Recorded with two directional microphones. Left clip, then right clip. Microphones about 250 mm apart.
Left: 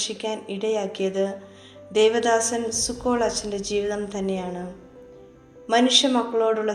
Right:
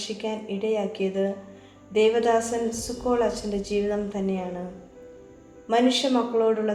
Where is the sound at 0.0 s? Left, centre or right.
Left.